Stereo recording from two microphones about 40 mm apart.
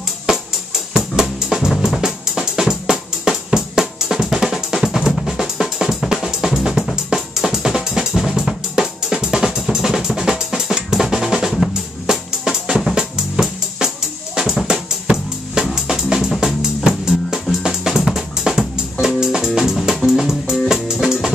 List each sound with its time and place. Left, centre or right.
0.9 s drum kit: centre
11.5 s drum: centre
12.9 s drum kit: centre
14.7 s drum: centre
15.7 s music: centre